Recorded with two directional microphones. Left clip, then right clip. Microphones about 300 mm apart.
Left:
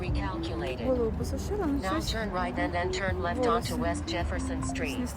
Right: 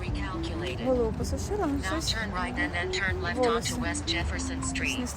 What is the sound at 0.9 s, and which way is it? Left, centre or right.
Vehicle, centre.